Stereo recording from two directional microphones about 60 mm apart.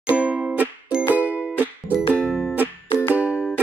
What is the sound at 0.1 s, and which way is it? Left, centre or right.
Music, right.